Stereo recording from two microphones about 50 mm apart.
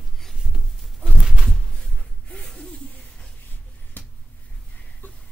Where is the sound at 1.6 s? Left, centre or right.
Centre.